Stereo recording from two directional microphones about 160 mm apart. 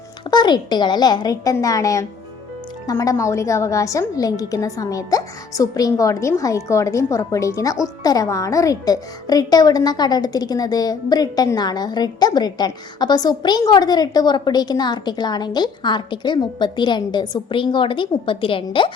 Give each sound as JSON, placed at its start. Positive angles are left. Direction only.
{"t": 0.3, "sound": "speech", "side_deg": 25}